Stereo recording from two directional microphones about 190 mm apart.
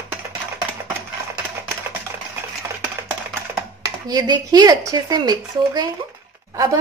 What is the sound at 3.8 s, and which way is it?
A woman's voice, 20° right (ahead or behind).